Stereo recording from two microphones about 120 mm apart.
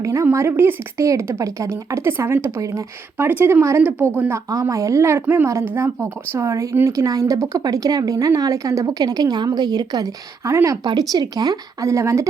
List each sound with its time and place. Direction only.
0.0 s a woman's voice: 25° right (ahead or behind)